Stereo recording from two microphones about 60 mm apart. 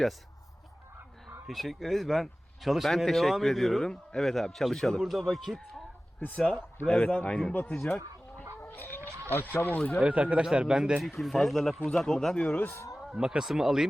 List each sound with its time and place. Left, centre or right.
1.5 s speech: centre
6.8 s a man's voice: centre
7.5 s speech: left
8.6 s chicken: left
9.3 s speech: left
10.0 s speech: right
11.0 s a man's voice: centre
13.1 s speech: centre